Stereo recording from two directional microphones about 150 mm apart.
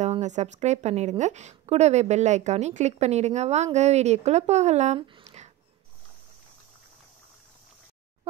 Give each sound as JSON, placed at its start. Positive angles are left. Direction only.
{"t": 0.0, "sound": "a woman's voice", "side_deg": -50}
{"t": 4.9, "sound": "speech", "side_deg": -35}
{"t": 5.2, "sound": "a sound", "side_deg": -50}